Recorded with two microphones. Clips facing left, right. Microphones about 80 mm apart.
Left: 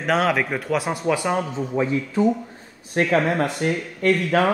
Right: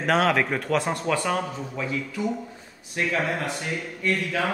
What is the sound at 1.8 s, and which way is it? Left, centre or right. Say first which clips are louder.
Speech: left 9 dB; left.